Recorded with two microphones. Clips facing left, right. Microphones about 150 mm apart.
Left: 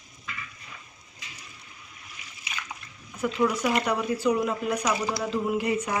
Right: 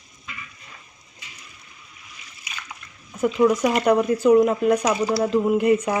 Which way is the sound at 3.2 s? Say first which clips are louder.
Right 7 dB; 45° right (ahead or behind).